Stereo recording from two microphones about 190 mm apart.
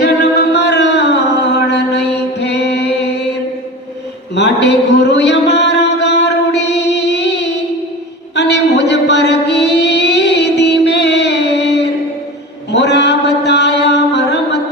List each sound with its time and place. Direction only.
0.0 s music: 60° left (ahead or behind)
4.4 s a sound: 65° left (ahead or behind)
8.4 s music: 65° left (ahead or behind)
12.7 s chant: 65° left (ahead or behind)